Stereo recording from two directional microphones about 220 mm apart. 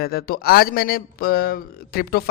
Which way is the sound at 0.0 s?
45° left (ahead or behind).